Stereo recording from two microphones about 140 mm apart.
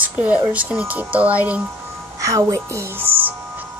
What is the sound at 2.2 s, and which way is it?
Speech, 25° right (ahead or behind).